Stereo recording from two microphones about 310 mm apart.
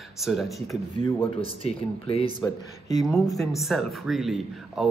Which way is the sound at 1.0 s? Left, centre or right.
Centre.